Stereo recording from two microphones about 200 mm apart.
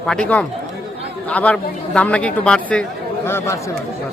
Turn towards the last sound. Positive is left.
turn(degrees=15)  # may be behind; listen again after turning